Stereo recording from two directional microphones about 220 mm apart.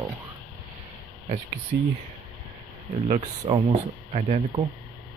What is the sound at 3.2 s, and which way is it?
Speech, 25° right (ahead or behind).